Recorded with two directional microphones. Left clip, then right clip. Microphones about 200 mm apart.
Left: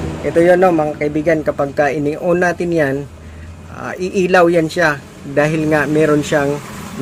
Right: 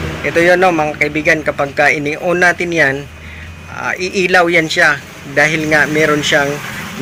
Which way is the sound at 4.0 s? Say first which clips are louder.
Even; 35° left (ahead or behind).